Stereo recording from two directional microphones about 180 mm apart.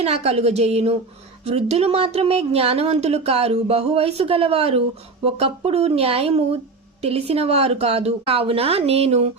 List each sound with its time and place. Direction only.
0.0 s speech: 35° right (ahead or behind)